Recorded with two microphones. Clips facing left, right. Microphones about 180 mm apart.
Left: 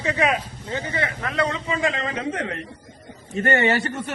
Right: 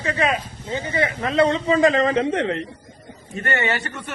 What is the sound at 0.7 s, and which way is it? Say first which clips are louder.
A man's voice: right 4 dB; 20° right (ahead or behind).